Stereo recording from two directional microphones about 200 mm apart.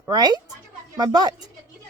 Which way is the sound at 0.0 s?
20° right (ahead or behind).